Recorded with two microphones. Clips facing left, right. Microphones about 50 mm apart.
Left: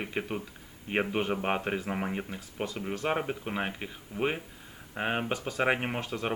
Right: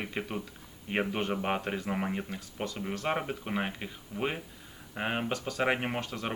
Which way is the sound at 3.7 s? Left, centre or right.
Centre.